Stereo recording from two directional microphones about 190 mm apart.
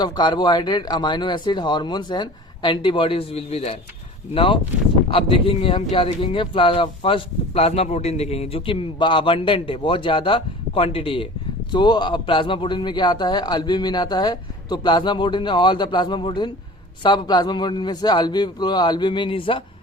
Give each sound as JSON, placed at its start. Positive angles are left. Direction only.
{"t": 0.0, "sound": "speech", "side_deg": 20}